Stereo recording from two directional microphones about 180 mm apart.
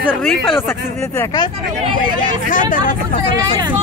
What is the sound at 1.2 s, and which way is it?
Speech, 20° left (ahead or behind).